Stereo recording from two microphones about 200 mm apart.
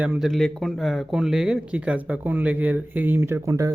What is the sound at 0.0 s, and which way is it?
Speech, 5° right (ahead or behind).